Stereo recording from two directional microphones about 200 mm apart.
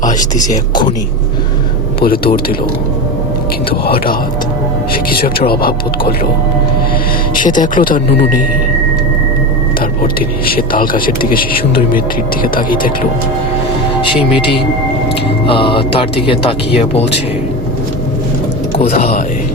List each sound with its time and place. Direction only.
0.0 s speech: 40° left (ahead or behind)
2.0 s speech: 50° left (ahead or behind)
3.7 s speech: 50° left (ahead or behind)
7.3 s speech: 40° left (ahead or behind)
10.0 s speech: 45° left (ahead or behind)
15.4 s speech: 25° left (ahead or behind)
18.8 s speech: 35° left (ahead or behind)